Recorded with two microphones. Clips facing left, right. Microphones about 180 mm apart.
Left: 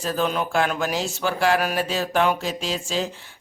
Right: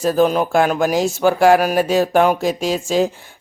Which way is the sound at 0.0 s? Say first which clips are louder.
Right 9 dB; 45° right (ahead or behind).